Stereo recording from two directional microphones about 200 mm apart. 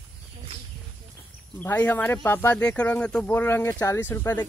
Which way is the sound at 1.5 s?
10° left (ahead or behind).